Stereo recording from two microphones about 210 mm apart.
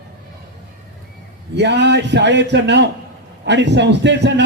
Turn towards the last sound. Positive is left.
turn(degrees=-55)  # may be behind; listen again after turning